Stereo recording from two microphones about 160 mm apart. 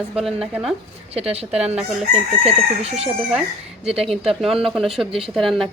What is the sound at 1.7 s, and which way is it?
Chicken, 10° right (ahead or behind).